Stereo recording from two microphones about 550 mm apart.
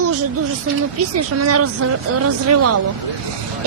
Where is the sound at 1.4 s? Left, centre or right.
Right.